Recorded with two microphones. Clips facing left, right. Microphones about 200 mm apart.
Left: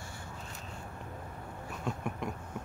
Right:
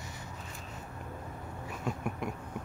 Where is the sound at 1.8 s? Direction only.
5° right (ahead or behind).